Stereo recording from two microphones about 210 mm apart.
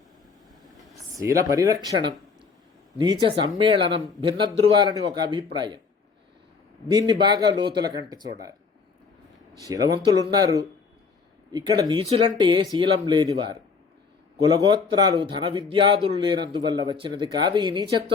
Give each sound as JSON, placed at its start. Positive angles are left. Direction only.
{"t": 1.1, "sound": "speech", "side_deg": -15}
{"t": 7.1, "sound": "speech", "side_deg": -20}
{"t": 9.6, "sound": "speech", "side_deg": -15}